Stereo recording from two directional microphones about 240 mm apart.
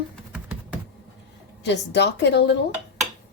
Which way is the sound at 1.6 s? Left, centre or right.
Left.